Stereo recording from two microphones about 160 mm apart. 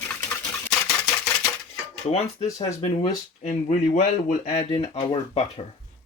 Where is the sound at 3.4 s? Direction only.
50° left (ahead or behind).